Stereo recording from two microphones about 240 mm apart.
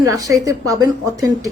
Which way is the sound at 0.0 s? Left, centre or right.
Centre.